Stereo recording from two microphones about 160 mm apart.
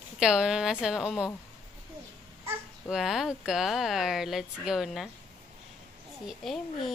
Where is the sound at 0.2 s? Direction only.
5° right (ahead or behind).